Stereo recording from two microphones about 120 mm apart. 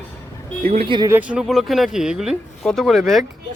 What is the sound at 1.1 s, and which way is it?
Speech, 5° right (ahead or behind).